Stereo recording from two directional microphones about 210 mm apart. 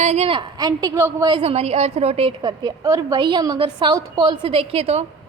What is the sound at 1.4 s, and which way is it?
A woman's voice, 30° right (ahead or behind).